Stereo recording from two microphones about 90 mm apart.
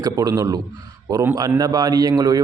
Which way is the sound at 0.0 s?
45° right (ahead or behind).